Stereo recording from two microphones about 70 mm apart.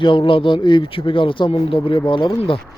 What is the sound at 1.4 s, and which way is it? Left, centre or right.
Speech, left.